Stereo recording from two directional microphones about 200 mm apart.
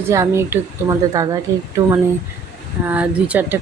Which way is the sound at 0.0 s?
15° right (ahead or behind).